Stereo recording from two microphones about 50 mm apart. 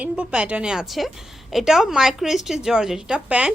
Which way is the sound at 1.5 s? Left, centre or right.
Centre.